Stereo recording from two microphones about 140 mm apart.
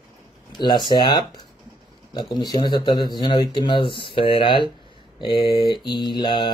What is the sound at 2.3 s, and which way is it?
Speech, 30° left (ahead or behind).